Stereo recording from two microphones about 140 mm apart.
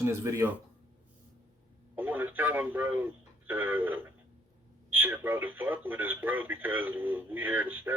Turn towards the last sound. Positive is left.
turn(degrees=-15)  # may be behind; listen again after turning